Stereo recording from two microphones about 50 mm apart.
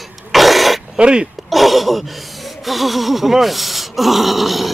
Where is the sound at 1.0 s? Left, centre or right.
Centre.